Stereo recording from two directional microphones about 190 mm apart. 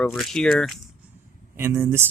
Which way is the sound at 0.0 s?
Centre (ahead or behind).